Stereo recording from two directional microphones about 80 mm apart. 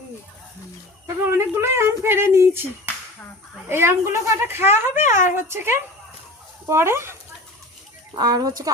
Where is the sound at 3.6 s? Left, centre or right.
Right.